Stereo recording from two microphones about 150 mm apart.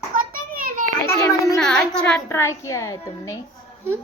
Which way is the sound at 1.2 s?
20° left (ahead or behind).